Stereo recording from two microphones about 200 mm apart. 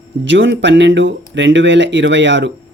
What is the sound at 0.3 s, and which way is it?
Speech, 65° right (ahead or behind).